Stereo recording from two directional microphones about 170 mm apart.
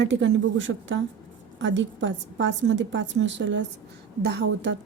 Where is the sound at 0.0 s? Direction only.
90° right.